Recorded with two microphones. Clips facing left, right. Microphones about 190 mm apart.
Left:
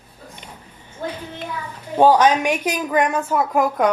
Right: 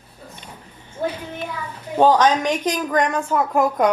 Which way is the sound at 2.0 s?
10° left (ahead or behind).